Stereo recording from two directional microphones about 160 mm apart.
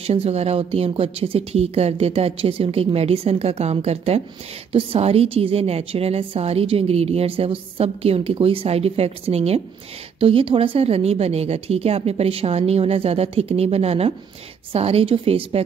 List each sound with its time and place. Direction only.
0.0 s a woman's voice: 40° right (ahead or behind)